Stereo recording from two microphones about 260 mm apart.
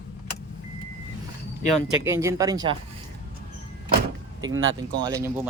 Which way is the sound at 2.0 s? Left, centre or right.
Centre.